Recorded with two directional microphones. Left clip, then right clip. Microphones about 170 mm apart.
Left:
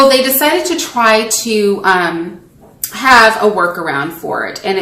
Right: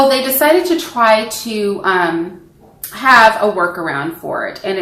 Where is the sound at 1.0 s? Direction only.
10° left (ahead or behind).